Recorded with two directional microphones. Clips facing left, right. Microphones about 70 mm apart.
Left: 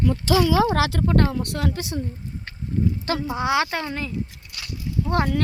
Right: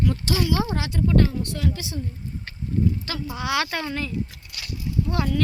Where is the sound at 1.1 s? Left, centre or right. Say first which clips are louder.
Right 3 dB; left.